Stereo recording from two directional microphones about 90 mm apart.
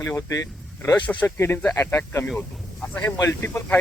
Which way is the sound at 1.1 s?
15° left (ahead or behind).